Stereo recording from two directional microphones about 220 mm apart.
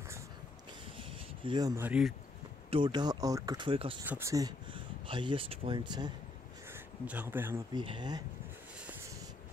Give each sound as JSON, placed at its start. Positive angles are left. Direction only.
{"t": 0.9, "sound": "a sound", "side_deg": -20}
{"t": 1.9, "sound": "speech", "side_deg": -5}
{"t": 2.7, "sound": "speech", "side_deg": -20}
{"t": 4.0, "sound": "speech", "side_deg": -10}
{"t": 6.7, "sound": "speech", "side_deg": -10}
{"t": 7.8, "sound": "speech", "side_deg": -20}